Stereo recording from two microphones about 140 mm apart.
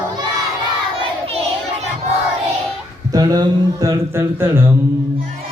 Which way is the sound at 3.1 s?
25° right (ahead or behind).